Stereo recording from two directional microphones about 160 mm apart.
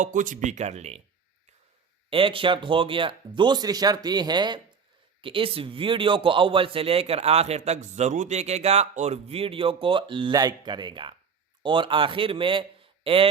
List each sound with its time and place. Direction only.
0.0 s speech: 55° right (ahead or behind)
2.0 s a man's voice: 35° right (ahead or behind)